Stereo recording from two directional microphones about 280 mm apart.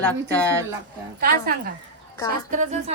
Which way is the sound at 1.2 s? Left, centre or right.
Right.